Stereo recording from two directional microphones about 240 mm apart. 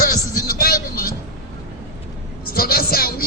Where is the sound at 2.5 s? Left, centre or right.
Left.